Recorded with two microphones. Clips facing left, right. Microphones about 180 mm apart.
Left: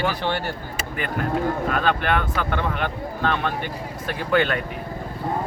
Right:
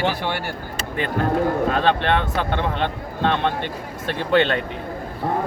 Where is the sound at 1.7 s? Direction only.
30° right (ahead or behind).